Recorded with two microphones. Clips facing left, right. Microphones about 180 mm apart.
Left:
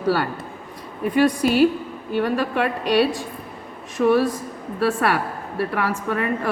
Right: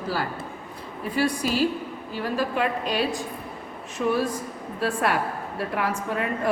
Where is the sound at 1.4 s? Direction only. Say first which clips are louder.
Left 7 dB; 60° left (ahead or behind).